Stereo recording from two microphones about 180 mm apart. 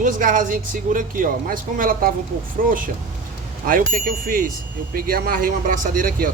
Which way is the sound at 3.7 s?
50° right (ahead or behind).